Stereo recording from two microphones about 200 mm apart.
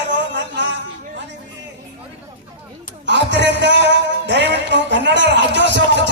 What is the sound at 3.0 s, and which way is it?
A man's voice, 60° right (ahead or behind).